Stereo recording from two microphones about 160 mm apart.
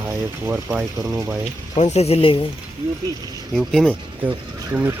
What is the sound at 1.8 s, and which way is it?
Speech, 45° left (ahead or behind).